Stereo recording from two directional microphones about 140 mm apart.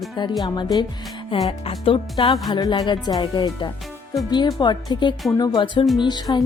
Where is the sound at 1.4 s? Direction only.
40° left (ahead or behind).